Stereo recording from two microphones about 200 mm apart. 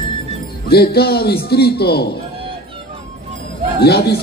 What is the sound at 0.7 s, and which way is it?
A man's voice, 50° left (ahead or behind).